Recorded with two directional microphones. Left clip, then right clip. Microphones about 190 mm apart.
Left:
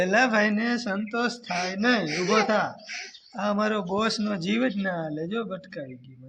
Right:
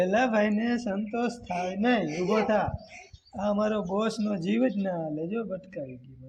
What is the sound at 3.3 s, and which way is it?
Speech, 15° left (ahead or behind).